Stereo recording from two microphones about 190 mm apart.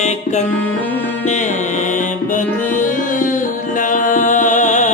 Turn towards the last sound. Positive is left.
turn(degrees=40)  # may be behind; listen again after turning